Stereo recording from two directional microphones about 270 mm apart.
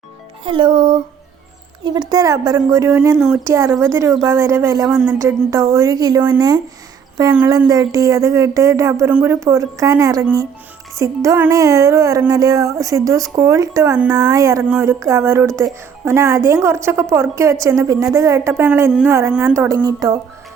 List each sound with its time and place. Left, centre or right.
0.4 s speech: centre